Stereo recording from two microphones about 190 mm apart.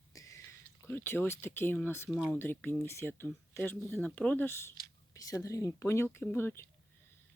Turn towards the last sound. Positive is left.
turn(degrees=10)  # may be behind; listen again after turning